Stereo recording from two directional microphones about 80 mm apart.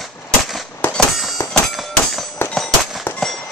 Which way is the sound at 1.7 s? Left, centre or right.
Centre.